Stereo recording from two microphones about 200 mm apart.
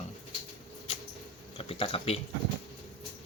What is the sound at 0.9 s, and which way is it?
Mouse, 30° left (ahead or behind).